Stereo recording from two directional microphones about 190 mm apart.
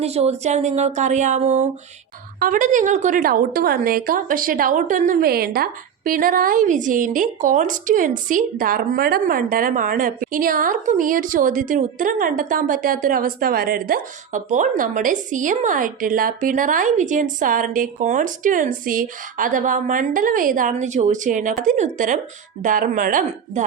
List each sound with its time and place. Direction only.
0.0 s a woman's voice: 35° right (ahead or behind)